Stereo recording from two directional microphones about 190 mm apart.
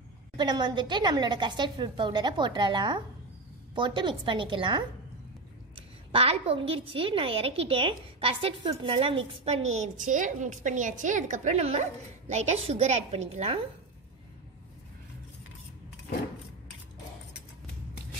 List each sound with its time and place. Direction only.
0.4 s a woman's voice: 20° right (ahead or behind)
6.1 s a woman's voice: 30° right (ahead or behind)